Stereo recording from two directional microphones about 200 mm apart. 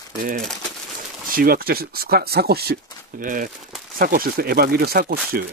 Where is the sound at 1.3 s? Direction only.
45° right (ahead or behind).